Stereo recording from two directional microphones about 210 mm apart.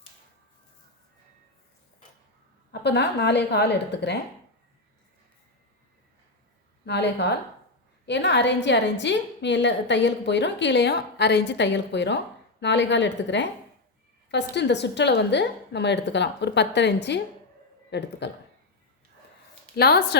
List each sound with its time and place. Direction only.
2.8 s a woman's voice: 55° left (ahead or behind)
6.8 s a woman's voice: 55° left (ahead or behind)
19.7 s a woman's voice: 50° left (ahead or behind)